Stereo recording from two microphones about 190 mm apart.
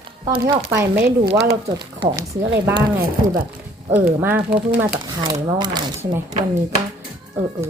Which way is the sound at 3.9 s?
10° right (ahead or behind).